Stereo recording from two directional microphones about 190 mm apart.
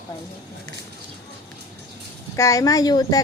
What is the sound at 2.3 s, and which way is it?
Speech, 15° left (ahead or behind).